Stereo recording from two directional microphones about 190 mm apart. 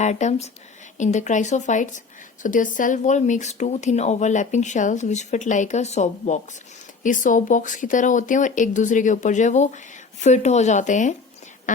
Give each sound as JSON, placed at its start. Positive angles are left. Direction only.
{"t": 0.0, "sound": "speech", "side_deg": 40}